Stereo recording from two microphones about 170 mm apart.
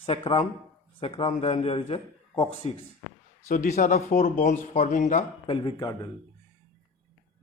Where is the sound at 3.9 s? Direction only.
60° left (ahead or behind).